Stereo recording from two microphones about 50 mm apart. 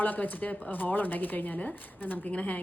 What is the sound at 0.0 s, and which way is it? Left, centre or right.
A woman's voice, left.